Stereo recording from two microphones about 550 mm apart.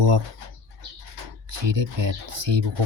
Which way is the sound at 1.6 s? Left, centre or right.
Right.